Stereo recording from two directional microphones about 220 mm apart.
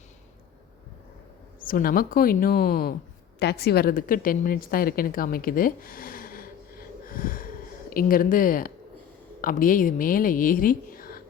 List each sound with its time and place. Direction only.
1.6 s a woman's voice: 40° left (ahead or behind)